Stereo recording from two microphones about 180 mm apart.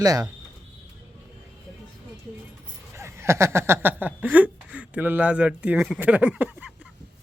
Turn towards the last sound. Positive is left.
turn(degrees=-10)  # may be behind; listen again after turning